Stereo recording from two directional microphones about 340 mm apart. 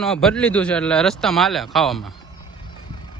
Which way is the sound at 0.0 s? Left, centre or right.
Centre.